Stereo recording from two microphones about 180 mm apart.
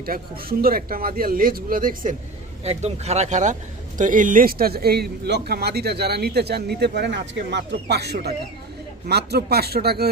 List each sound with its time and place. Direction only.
0.0 s speech: 55° right (ahead or behind)
2.6 s speech: 35° right (ahead or behind); by 10.1 s 60° right (ahead or behind)